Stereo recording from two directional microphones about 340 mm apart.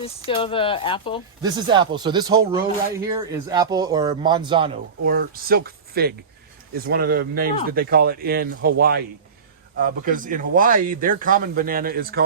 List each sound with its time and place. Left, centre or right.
0.3 s speech: centre
1.4 s speech: centre
5.0 s speech: right